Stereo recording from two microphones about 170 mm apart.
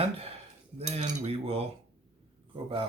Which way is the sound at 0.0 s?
35° right (ahead or behind).